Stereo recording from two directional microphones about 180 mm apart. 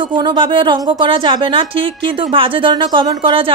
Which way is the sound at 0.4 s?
25° right (ahead or behind).